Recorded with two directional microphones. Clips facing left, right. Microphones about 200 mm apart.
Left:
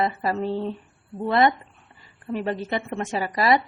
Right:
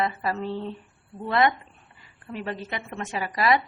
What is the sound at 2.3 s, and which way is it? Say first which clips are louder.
A woman's voice: left 6 dB; 45° left (ahead or behind).